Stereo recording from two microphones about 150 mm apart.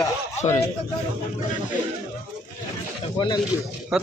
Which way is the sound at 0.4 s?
45° left (ahead or behind).